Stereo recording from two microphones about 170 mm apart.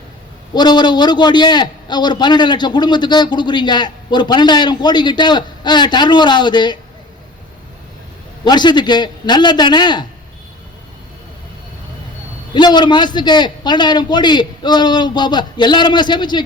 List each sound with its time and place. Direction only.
0.5 s a man's voice: 25° left (ahead or behind)
8.4 s a man's voice: 25° left (ahead or behind)
12.5 s a man's voice: 25° left (ahead or behind)